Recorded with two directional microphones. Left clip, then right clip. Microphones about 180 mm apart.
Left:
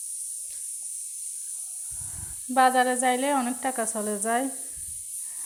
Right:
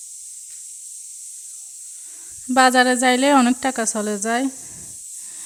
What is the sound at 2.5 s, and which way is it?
Speech, 50° right (ahead or behind).